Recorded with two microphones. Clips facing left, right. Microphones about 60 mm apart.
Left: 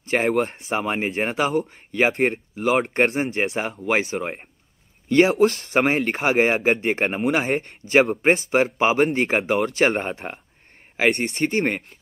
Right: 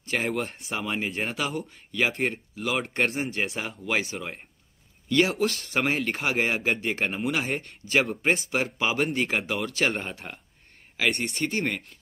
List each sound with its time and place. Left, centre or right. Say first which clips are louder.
0.0 s a sound: left 7 dB; left
0.3 s speech: left 8 dB; left
2.8 s speech: left 6 dB; left
7.6 s speech: left 7 dB; left
8.7 s speech: left 7 dB; left
11.0 s speech: left 6 dB; left